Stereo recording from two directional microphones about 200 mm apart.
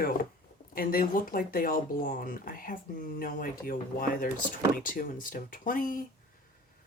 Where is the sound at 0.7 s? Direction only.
45° left (ahead or behind).